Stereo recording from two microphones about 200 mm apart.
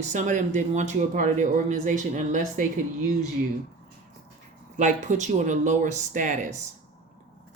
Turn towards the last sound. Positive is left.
turn(degrees=-40)  # may be behind; listen again after turning